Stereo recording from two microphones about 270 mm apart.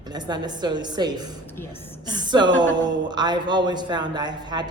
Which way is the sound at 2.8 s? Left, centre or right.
Right.